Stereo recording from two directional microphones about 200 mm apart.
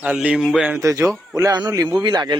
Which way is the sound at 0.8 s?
15° right (ahead or behind).